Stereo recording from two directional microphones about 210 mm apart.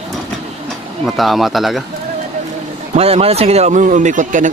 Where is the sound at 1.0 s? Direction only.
Centre (ahead or behind).